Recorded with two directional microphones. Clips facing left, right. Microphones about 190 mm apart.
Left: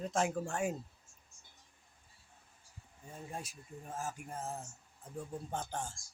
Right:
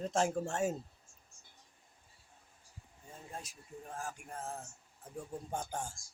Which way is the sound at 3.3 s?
10° left (ahead or behind).